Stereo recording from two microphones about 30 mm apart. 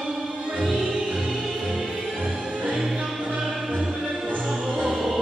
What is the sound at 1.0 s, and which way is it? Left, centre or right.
Music, centre.